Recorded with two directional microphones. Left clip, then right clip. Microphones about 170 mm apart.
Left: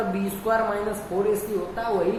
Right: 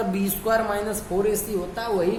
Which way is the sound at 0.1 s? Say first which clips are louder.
Right 1 dB; 50° right (ahead or behind).